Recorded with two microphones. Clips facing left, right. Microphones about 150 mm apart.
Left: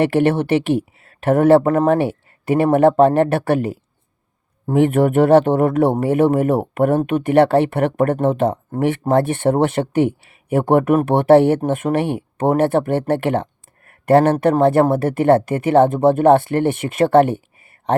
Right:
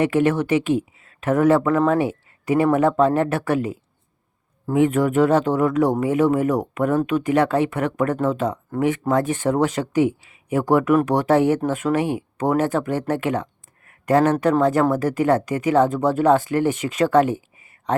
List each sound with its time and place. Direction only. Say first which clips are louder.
0.0 s speech: left 3 dB; 65° left (ahead or behind)
1.6 s speech: left 3 dB; 50° left (ahead or behind)
14.4 s speech: left 4 dB; 60° left (ahead or behind)